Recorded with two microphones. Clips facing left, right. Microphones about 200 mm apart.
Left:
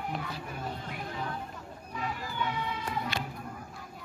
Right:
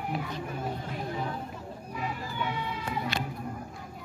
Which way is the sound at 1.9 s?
5° right (ahead or behind).